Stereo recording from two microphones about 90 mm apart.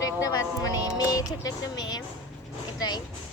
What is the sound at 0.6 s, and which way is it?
Music, 45° left (ahead or behind).